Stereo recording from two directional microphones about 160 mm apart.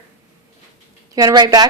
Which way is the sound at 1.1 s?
25° right (ahead or behind).